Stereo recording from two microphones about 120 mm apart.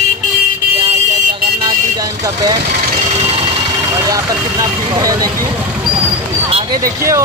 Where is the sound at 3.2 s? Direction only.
60° right (ahead or behind).